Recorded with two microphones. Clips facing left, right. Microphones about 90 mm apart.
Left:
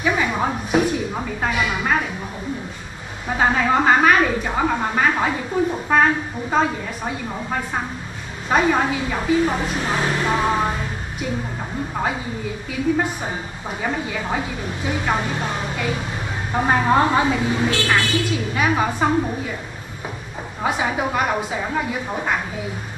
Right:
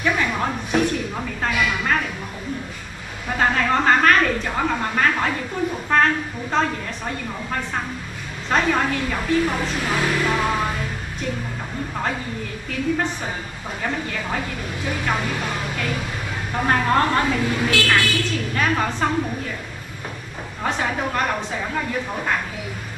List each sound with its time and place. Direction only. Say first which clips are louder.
0.0 s a sound: left 1 dB; 10° left (ahead or behind)
3.3 s a woman's voice: left 2 dB; 10° left (ahead or behind)
9.9 s music: even; 25° left (ahead or behind)
12.7 s a woman's voice: left 2 dB; 10° left (ahead or behind)
14.9 s music: left 2 dB; 15° left (ahead or behind)
15.7 s a woman's voice: left 1 dB; 10° left (ahead or behind)
20.6 s a woman's voice: left 2 dB; 10° left (ahead or behind)